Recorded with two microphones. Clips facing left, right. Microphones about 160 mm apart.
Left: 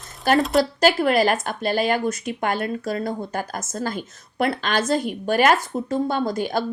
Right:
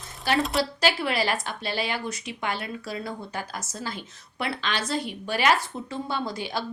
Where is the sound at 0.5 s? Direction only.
45° left (ahead or behind).